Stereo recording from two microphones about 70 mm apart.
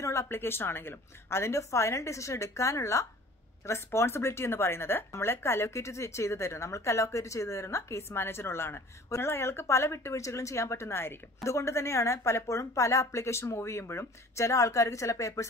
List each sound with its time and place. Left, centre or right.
0.0 s a woman's voice: left